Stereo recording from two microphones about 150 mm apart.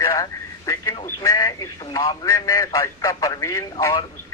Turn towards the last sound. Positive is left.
turn(degrees=20)  # may be behind; listen again after turning